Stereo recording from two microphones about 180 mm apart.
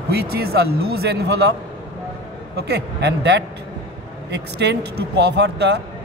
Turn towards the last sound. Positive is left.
turn(degrees=-70)  # may be behind; listen again after turning